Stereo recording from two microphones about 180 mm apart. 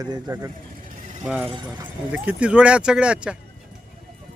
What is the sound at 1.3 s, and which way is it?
Speech, 5° right (ahead or behind).